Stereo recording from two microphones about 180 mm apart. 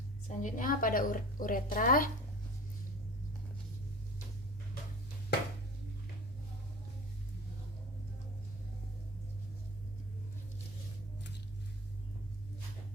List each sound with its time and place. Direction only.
0.3 s a woman's voice: 45° left (ahead or behind)